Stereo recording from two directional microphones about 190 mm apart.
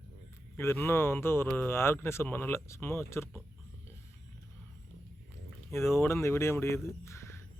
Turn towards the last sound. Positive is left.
turn(degrees=15)  # may be behind; listen again after turning